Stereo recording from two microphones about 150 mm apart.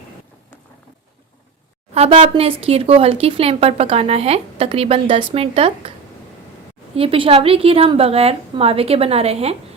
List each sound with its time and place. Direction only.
1.9 s speech: 40° right (ahead or behind)
6.9 s speech: 40° right (ahead or behind)